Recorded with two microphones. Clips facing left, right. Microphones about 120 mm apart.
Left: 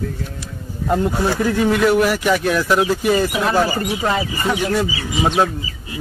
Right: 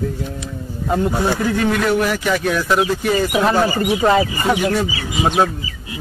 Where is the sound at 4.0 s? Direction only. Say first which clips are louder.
Right 7 dB; 20° right (ahead or behind).